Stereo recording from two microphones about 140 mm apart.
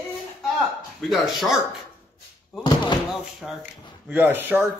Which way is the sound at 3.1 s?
Centre (ahead or behind).